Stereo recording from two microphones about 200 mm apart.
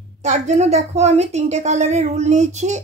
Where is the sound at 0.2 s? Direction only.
35° right (ahead or behind).